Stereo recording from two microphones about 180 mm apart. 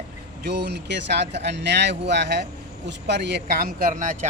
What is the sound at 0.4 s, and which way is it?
Speech, 70° right (ahead or behind).